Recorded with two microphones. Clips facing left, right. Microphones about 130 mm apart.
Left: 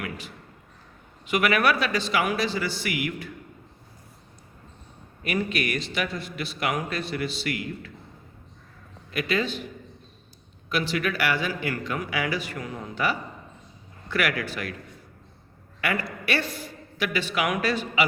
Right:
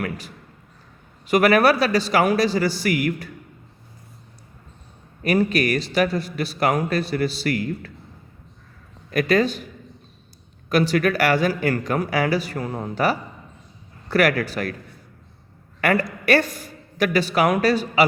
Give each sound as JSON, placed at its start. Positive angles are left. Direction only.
{"t": 0.0, "sound": "a sound", "side_deg": -40}
{"t": 1.3, "sound": "a man's voice", "side_deg": -40}
{"t": 5.2, "sound": "a man's voice", "side_deg": -40}
{"t": 9.1, "sound": "a man's voice", "side_deg": -40}
{"t": 10.7, "sound": "a man's voice", "side_deg": -40}
{"t": 15.8, "sound": "a man's voice", "side_deg": -45}